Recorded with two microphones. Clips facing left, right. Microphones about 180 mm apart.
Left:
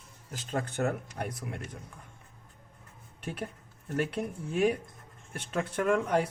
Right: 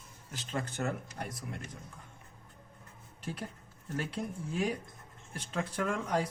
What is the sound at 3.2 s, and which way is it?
Speech, 60° left (ahead or behind).